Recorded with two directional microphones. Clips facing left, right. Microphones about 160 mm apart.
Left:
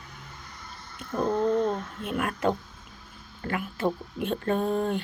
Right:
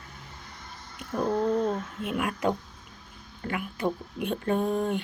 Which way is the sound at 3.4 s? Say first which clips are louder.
Left 1 dB; centre (ahead or behind).